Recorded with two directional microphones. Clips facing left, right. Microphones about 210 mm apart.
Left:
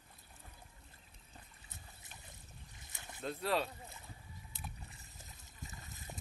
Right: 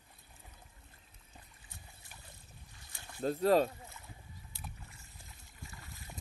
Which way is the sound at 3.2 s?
40° right (ahead or behind).